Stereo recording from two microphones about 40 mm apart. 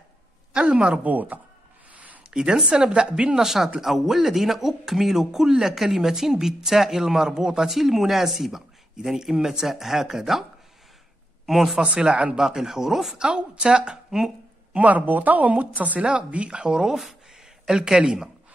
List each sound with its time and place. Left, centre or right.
0.5 s speech: right
1.0 s speech: right
2.3 s speech: centre
3.4 s speech: centre
11.4 s speech: centre
11.8 s speech: right
12.4 s speech: centre
13.2 s speech: right
14.7 s a woman's voice: right
16.1 s speech: right